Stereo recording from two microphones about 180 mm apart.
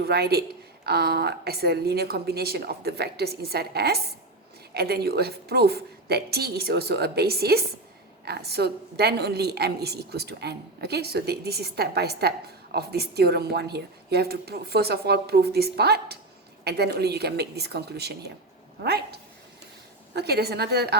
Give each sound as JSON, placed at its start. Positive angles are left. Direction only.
{"t": 0.0, "sound": "a woman's voice", "side_deg": -60}